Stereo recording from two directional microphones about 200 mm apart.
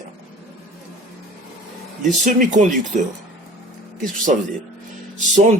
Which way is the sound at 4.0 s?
40° right (ahead or behind).